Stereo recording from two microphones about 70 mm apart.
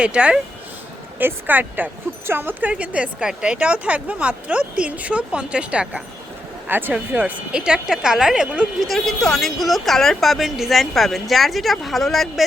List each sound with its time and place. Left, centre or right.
0.0 s speech: centre
1.2 s speech: right
6.7 s speech: right; by 8.4 s centre
8.8 s speech: centre